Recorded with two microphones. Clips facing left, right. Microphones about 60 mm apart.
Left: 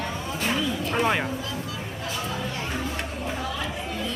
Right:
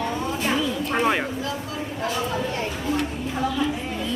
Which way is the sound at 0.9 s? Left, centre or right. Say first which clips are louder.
Right 2 dB; centre.